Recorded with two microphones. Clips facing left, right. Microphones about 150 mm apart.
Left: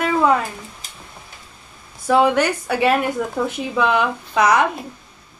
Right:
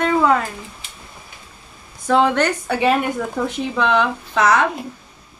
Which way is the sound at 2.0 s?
10° left (ahead or behind).